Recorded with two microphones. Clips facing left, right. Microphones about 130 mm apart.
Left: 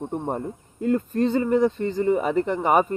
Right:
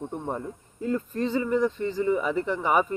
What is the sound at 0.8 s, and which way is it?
Speech, 60° left (ahead or behind).